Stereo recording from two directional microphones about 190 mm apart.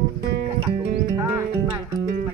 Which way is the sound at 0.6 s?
25° right (ahead or behind).